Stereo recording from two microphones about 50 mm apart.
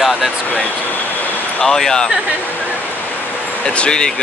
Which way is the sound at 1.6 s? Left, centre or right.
Centre.